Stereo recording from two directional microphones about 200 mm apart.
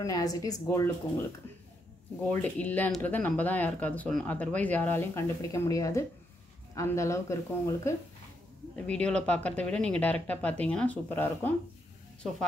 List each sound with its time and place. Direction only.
0.0 s speech: 20° left (ahead or behind)
2.2 s speech: 10° left (ahead or behind)